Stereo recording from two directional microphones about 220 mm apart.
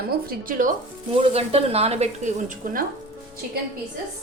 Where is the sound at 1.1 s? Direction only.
25° right (ahead or behind).